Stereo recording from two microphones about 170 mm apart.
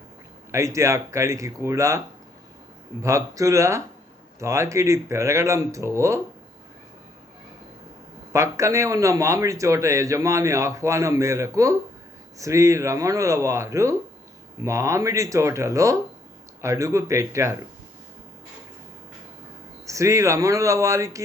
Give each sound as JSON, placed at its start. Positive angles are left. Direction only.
{"t": 0.5, "sound": "a man's voice", "side_deg": -15}
{"t": 3.0, "sound": "a man's voice", "side_deg": -20}
{"t": 8.3, "sound": "a man's voice", "side_deg": -20}
{"t": 19.9, "sound": "speech", "side_deg": -15}